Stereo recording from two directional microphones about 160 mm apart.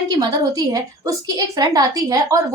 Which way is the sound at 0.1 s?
25° right (ahead or behind).